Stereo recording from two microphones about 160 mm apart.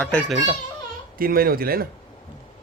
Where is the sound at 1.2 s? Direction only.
65° right (ahead or behind).